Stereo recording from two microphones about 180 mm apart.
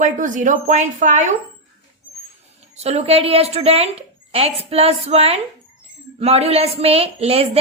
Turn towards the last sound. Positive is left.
turn(degrees=-35)  # may be behind; listen again after turning